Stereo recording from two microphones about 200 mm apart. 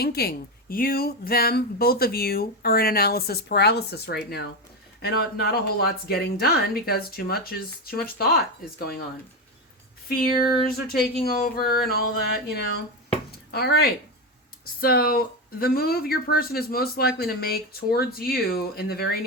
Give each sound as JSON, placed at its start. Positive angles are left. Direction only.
{"t": 0.0, "sound": "speech", "side_deg": 50}
{"t": 10.1, "sound": "speech", "side_deg": 45}
{"t": 13.5, "sound": "speech", "side_deg": 55}